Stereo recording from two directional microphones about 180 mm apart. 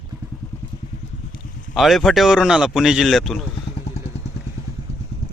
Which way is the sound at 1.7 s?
Centre (ahead or behind).